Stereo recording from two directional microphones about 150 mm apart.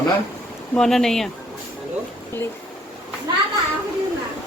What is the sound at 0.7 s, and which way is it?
Speech, 5° left (ahead or behind).